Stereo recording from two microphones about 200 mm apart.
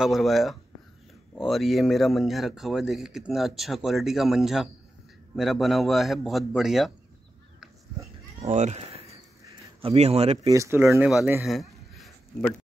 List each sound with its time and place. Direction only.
0.0 s speech: centre (ahead or behind)
8.4 s speech: 35° right (ahead or behind)
10.5 s speech: 15° right (ahead or behind)
11.4 s a sound: centre (ahead or behind)